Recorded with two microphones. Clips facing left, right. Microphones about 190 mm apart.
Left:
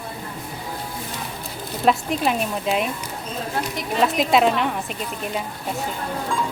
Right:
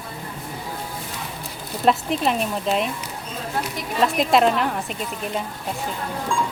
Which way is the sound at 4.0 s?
Centre (ahead or behind).